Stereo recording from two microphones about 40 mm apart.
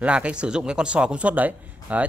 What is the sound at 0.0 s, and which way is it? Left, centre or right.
Speech, right.